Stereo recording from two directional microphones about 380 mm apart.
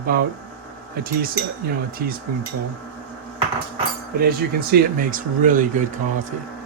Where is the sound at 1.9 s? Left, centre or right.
Right.